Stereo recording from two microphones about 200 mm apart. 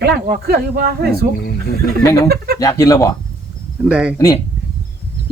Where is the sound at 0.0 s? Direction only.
50° right (ahead or behind).